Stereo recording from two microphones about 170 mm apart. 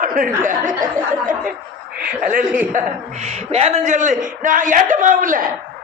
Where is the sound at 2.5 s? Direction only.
45° right (ahead or behind).